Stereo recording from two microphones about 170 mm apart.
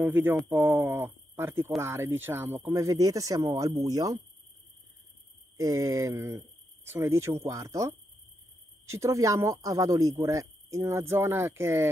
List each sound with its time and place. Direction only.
0.0 s speech: 10° right (ahead or behind)
5.6 s speech: 20° right (ahead or behind)